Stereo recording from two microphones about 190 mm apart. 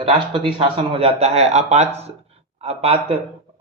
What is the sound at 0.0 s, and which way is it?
A man's voice, 25° right (ahead or behind).